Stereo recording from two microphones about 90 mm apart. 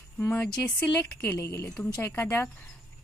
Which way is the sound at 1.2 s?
30° left (ahead or behind).